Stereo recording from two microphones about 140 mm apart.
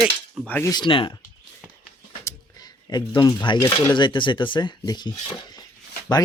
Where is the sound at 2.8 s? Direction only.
25° left (ahead or behind).